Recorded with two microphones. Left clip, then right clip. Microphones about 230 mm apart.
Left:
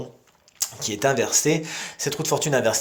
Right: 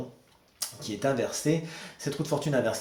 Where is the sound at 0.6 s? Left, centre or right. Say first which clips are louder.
Left 7 dB; left.